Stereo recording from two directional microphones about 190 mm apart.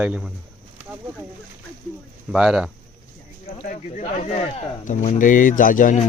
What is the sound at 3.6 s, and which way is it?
Speech, 40° left (ahead or behind).